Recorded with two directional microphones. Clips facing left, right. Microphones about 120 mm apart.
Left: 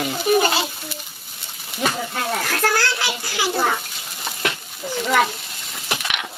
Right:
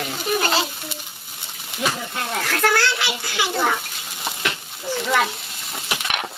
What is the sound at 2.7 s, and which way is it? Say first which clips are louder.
Speech: right 1 dB; 60° right (ahead or behind).